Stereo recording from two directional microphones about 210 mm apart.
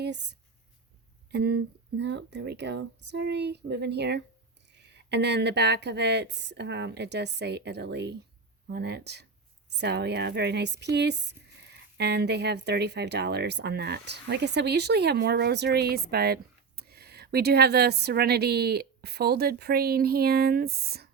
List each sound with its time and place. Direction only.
0.0 s speech: 55° right (ahead or behind)